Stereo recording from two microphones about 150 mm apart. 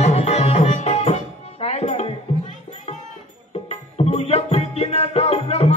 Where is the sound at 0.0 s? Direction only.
45° left (ahead or behind).